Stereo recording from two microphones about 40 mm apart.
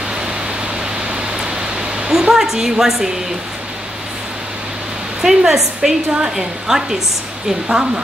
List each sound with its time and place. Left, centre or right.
1.4 s pink noise: centre
5.2 s a woman's voice: centre